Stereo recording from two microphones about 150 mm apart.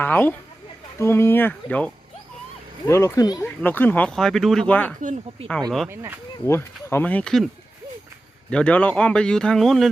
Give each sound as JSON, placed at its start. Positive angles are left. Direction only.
{"t": 0.0, "sound": "speech", "side_deg": 10}
{"t": 3.4, "sound": "speech", "side_deg": 10}
{"t": 4.9, "sound": "speech", "side_deg": -55}
{"t": 5.9, "sound": "speech", "side_deg": -15}
{"t": 6.4, "sound": "speech", "side_deg": 15}